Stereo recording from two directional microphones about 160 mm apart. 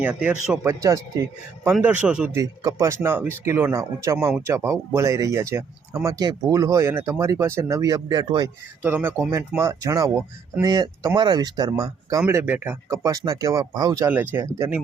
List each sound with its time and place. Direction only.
0.0 s speech: 10° right (ahead or behind)
0.7 s speech: 20° right (ahead or behind)
1.8 s speech: 5° right (ahead or behind)
2.3 s speech: 20° right (ahead or behind)
8.8 s speech: 10° right (ahead or behind)
14.1 s speech: 10° right (ahead or behind)